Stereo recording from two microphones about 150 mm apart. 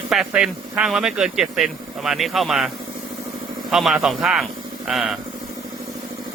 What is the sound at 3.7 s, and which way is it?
Speech, 5° right (ahead or behind).